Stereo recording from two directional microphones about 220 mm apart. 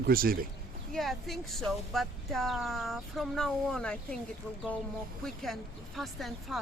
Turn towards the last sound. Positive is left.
turn(degrees=0)  # may be behind; listen again after turning